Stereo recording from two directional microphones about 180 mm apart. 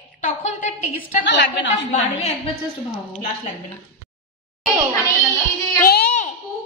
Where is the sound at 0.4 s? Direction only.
40° left (ahead or behind).